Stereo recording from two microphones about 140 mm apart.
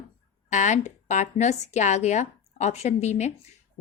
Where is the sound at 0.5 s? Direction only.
55° left (ahead or behind).